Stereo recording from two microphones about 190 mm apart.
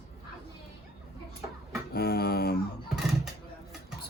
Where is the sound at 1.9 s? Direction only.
55° left (ahead or behind).